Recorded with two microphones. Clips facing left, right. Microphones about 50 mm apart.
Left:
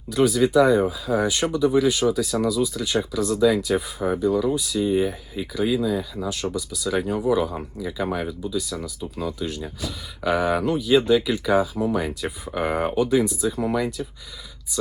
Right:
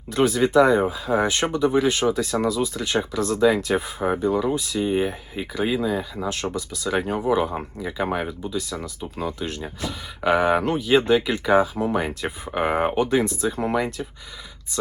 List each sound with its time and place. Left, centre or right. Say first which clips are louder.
0.1 s speech: even; right